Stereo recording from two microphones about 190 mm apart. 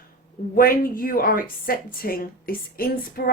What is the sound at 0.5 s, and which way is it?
A woman's voice, 50° left (ahead or behind).